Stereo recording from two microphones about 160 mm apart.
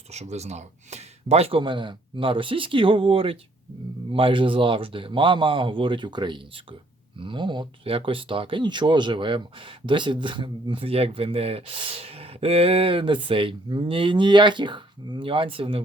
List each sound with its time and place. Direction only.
0.1 s speech: 45° right (ahead or behind)